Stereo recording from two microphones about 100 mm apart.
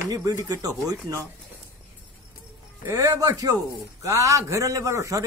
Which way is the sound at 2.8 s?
30° right (ahead or behind).